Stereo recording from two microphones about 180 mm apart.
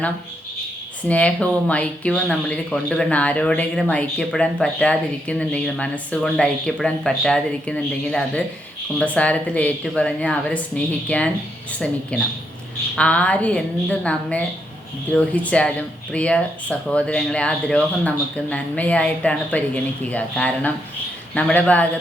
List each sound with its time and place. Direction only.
1.0 s speech: 5° left (ahead or behind)